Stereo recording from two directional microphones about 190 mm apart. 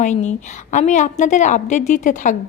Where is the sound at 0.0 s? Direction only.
40° left (ahead or behind).